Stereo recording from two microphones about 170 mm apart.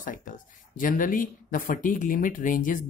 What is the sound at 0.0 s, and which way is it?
Speech, 50° left (ahead or behind).